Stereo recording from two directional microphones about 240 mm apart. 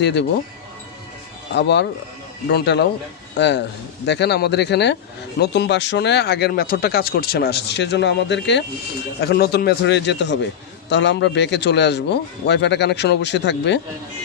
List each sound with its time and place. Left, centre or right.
0.0 s speech: left
1.5 s speech: left